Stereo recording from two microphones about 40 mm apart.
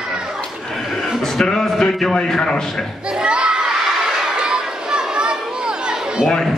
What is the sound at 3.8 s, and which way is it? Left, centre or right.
Crowd, centre.